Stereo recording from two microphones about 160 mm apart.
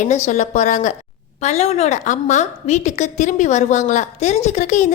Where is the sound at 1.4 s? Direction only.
40° left (ahead or behind).